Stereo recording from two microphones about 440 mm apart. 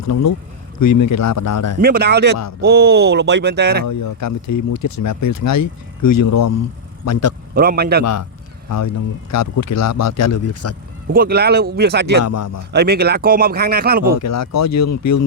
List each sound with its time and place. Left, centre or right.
0.0 s speech: left
1.8 s speech: right
3.8 s speech: left
7.5 s speech: centre
9.3 s speech: left
11.1 s speech: centre
12.2 s speech: left
12.7 s speech: right
14.2 s speech: left